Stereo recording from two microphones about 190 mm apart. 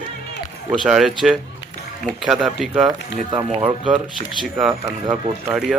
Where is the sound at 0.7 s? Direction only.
5° right (ahead or behind).